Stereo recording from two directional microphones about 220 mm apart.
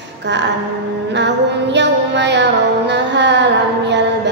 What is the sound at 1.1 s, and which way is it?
Music, 50° right (ahead or behind).